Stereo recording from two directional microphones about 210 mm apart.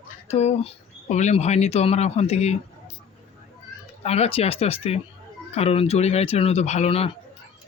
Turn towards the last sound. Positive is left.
turn(degrees=25)  # may be behind; listen again after turning